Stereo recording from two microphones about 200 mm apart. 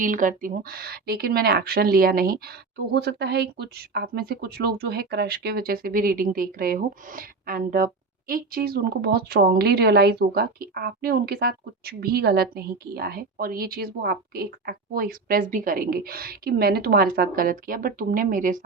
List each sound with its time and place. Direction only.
0.0 s a woman's voice: 40° right (ahead or behind)